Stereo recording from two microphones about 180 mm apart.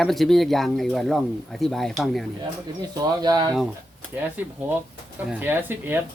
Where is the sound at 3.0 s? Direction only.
20° right (ahead or behind).